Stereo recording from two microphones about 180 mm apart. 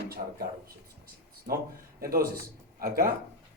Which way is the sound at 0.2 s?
40° right (ahead or behind).